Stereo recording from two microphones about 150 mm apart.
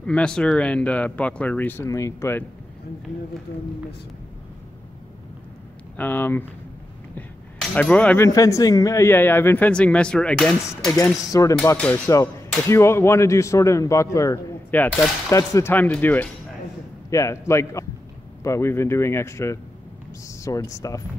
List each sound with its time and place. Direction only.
0.0 s speech: 5° left (ahead or behind)
5.9 s speech: 15° left (ahead or behind)
7.7 s speech: 10° left (ahead or behind)
8.3 s speech: 20° left (ahead or behind); by 10.9 s 5° left (ahead or behind)
11.1 s speech: 20° left (ahead or behind)
11.6 s speech: 10° left (ahead or behind)